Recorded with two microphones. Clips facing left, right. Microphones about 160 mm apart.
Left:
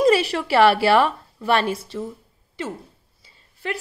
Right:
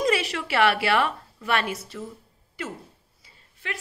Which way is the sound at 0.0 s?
35° left (ahead or behind).